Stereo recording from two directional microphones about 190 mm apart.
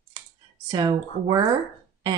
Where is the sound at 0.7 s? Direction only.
20° right (ahead or behind).